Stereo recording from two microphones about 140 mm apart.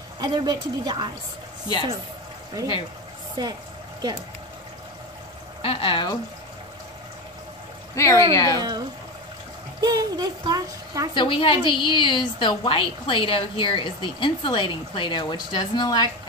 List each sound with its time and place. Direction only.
0.2 s a woman's voice: 35° right (ahead or behind)
3.4 s speech: 30° right (ahead or behind)
5.6 s speech: 40° left (ahead or behind)
7.9 s speech: 20° left (ahead or behind)
8.5 s speech: 30° right (ahead or behind)
11.1 s a woman's voice: 40° left (ahead or behind)